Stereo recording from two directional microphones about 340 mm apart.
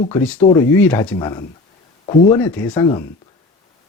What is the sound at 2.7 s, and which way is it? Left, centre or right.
Speech, centre.